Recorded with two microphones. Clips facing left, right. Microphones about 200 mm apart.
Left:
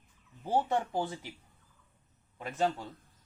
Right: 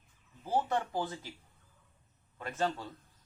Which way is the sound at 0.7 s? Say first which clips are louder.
Left 2 dB; 15° left (ahead or behind).